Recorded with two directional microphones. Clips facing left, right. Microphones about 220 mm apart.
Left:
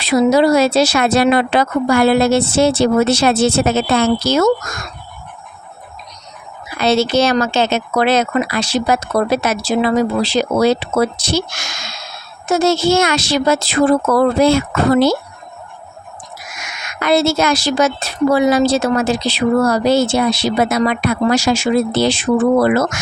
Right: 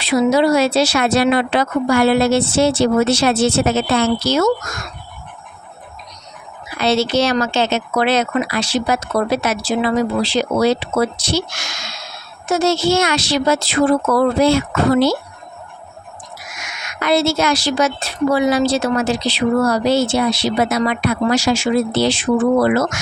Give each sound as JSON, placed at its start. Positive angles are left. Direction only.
{"t": 0.0, "sound": "speech", "side_deg": 40}
{"t": 6.7, "sound": "speech", "side_deg": 45}
{"t": 17.0, "sound": "speech", "side_deg": 45}